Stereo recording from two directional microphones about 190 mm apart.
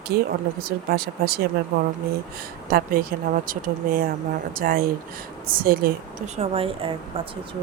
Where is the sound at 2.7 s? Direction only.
50° right (ahead or behind).